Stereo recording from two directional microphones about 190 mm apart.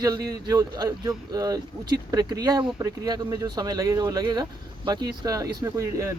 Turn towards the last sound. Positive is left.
turn(degrees=-15)  # may be behind; listen again after turning